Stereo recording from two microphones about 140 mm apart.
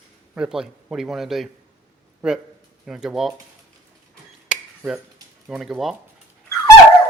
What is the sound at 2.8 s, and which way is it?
Speech, 5° right (ahead or behind).